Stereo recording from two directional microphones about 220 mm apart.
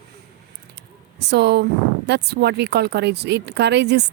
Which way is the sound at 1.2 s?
50° right (ahead or behind).